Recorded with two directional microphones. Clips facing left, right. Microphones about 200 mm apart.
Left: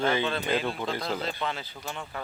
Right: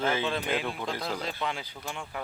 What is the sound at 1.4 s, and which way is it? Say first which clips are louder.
Speech: left 1 dB; 15° right (ahead or behind).